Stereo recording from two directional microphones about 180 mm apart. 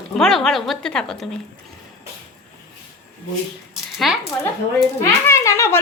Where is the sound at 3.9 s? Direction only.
Centre (ahead or behind).